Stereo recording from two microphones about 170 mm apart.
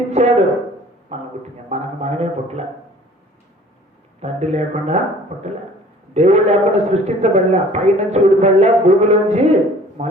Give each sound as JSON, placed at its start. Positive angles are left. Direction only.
{"t": 0.1, "sound": "a sound", "side_deg": -40}
{"t": 1.7, "sound": "a man's voice", "side_deg": -40}
{"t": 4.2, "sound": "a man's voice", "side_deg": -40}